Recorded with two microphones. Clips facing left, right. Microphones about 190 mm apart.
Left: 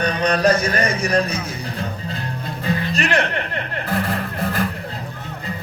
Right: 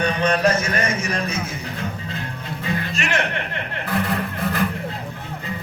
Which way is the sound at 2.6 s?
35° left (ahead or behind).